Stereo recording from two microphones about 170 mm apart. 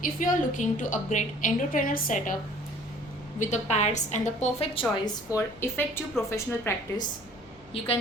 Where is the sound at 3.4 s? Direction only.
45° left (ahead or behind).